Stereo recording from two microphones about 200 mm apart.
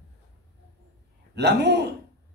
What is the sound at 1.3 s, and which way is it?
Speech, 55° right (ahead or behind).